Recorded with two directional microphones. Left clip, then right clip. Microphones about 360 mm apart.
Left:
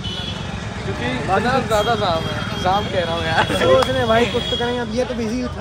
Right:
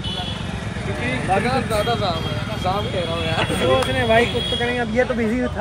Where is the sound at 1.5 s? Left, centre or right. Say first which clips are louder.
Left 3 dB; centre.